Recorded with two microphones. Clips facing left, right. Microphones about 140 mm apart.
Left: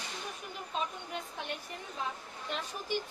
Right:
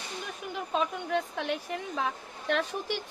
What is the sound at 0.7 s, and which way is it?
A woman's voice, 85° right.